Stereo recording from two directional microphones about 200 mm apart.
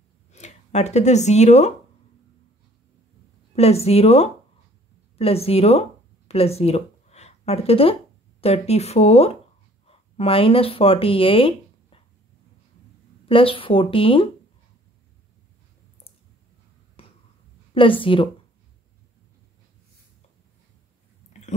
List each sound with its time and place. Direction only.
0.3 s speech: 35° left (ahead or behind)
3.5 s speech: 30° left (ahead or behind)
13.2 s speech: 25° left (ahead or behind)
17.7 s speech: 25° left (ahead or behind)
21.3 s dog: 35° left (ahead or behind)